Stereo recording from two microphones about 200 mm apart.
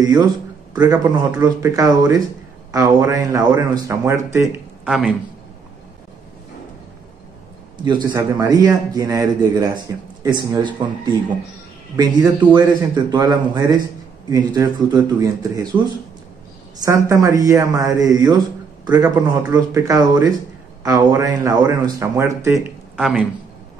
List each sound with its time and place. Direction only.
0.7 s a man's voice: 15° right (ahead or behind)
4.8 s speech: centre (ahead or behind)
7.7 s a man's voice: 20° right (ahead or behind)
16.8 s a man's voice: 15° right (ahead or behind)
22.9 s speech: centre (ahead or behind)